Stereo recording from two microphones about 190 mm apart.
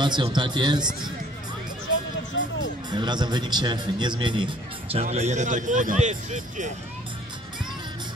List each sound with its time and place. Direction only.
0.0 s a man's voice: 25° right (ahead or behind)
1.9 s a sound: 75° left (ahead or behind)
2.9 s a man's voice: 20° right (ahead or behind); by 6.7 s 40° right (ahead or behind)